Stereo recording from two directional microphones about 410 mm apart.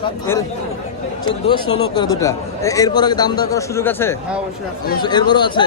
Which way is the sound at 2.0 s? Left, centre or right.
Centre.